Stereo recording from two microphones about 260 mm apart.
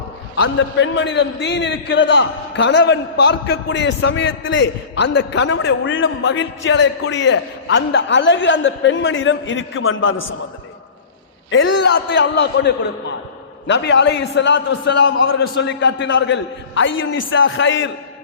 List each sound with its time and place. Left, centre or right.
0.4 s a man's voice: left
11.5 s a man's voice: left